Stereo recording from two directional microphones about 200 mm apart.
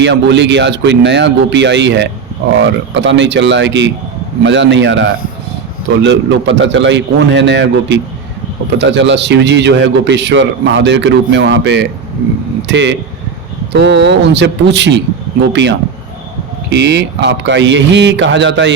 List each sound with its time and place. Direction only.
0.0 s a man's voice: 60° right (ahead or behind)
16.6 s a man's voice: 60° right (ahead or behind)